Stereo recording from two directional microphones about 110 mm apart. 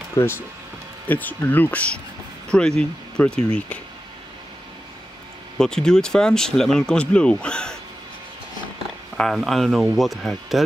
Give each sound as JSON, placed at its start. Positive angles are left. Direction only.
{"t": 0.1, "sound": "speech", "side_deg": 25}
{"t": 5.6, "sound": "speech", "side_deg": 5}
{"t": 9.1, "sound": "speech", "side_deg": 0}